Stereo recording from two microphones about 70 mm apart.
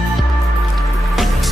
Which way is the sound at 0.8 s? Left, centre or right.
Centre.